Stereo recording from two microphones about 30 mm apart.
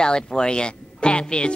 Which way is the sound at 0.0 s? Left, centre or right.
Left.